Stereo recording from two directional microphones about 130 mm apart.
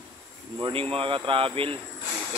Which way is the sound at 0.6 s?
45° right (ahead or behind).